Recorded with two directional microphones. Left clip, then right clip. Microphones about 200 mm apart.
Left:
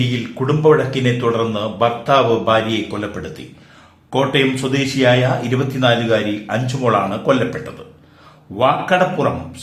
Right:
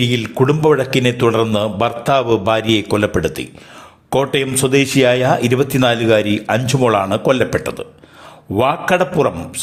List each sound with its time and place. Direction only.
0.1 s speech: 40° right (ahead or behind)